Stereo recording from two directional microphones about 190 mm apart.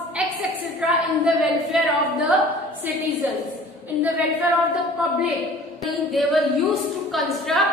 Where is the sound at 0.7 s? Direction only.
5° right (ahead or behind).